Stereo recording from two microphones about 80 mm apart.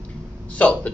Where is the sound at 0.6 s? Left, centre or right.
Centre.